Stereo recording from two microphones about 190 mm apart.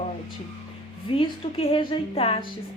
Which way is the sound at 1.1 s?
30° left (ahead or behind).